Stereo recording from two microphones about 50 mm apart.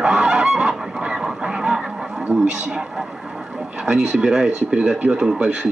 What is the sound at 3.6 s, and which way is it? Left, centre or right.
Speech, centre.